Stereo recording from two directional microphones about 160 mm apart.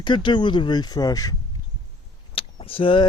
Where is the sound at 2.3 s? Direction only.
35° left (ahead or behind).